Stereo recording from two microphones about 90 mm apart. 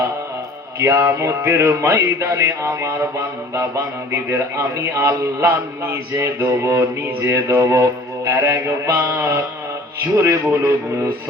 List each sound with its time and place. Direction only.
0.8 s music: 30° right (ahead or behind)
4.1 s a man's voice: 30° right (ahead or behind)